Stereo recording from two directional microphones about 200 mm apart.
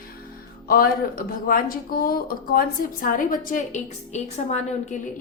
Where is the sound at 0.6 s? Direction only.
45° left (ahead or behind).